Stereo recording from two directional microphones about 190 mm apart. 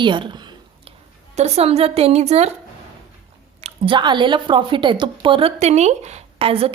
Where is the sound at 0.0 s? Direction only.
25° right (ahead or behind).